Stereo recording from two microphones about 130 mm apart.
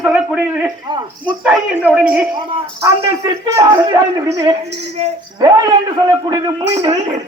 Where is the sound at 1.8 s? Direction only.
10° right (ahead or behind).